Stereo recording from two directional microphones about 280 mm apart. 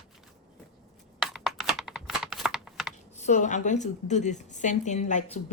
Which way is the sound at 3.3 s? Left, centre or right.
Left.